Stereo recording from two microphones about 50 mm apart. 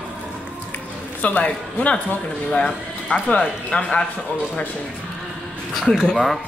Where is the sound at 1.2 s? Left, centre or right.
Left.